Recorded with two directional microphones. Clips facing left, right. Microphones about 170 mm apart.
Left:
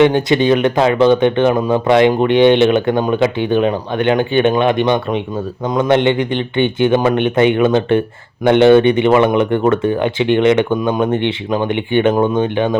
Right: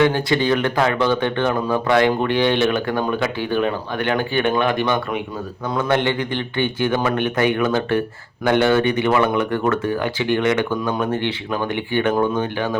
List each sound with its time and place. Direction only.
0.0 s speech: 20° left (ahead or behind)